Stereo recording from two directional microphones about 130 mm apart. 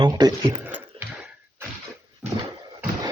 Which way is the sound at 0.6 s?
15° right (ahead or behind).